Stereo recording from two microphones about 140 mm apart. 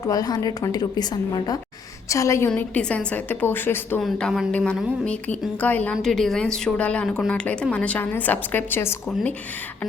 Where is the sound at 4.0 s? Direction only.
5° left (ahead or behind).